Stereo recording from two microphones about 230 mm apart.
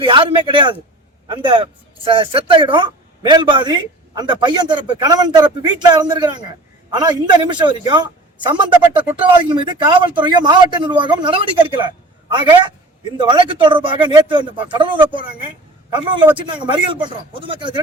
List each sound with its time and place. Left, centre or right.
0.0 s speech: right
8.7 s speech: centre
9.5 s a man's voice: centre
16.4 s speech: right